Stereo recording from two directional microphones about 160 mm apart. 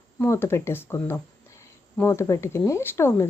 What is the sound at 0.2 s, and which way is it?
Speech, 15° left (ahead or behind).